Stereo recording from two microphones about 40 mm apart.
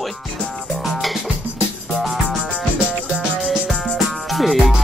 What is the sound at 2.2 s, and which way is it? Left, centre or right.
Music, right.